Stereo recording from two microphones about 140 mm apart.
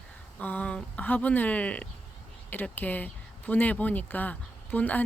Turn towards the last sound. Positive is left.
turn(degrees=10)  # may be behind; listen again after turning